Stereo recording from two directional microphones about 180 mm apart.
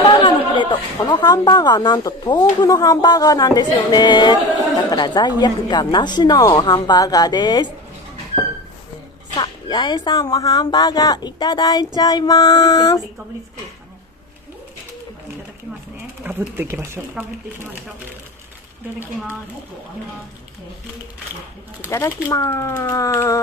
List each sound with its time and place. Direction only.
0.0 s a woman's voice: 25° left (ahead or behind)
9.4 s a woman's voice: 25° left (ahead or behind)
16.3 s speech: 10° right (ahead or behind)
21.8 s speech: 15° left (ahead or behind)